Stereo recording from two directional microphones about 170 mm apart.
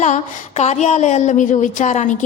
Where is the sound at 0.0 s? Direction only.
45° left (ahead or behind).